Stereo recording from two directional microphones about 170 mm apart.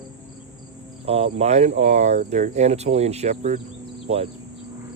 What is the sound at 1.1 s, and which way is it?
Speech, 35° right (ahead or behind).